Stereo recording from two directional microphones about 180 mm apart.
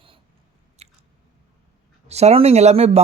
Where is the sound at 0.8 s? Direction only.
35° right (ahead or behind).